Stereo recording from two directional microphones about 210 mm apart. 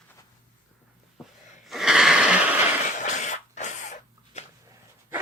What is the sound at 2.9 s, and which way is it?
Cough, 35° left (ahead or behind).